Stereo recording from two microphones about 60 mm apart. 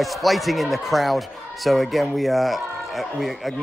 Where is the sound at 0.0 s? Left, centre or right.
Centre.